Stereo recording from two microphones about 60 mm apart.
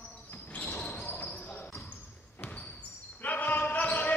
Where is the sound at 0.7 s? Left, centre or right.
Left.